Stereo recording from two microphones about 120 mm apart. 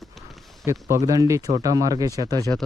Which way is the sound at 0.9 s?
30° right (ahead or behind).